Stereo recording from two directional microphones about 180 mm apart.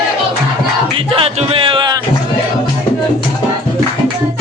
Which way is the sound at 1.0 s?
30° right (ahead or behind).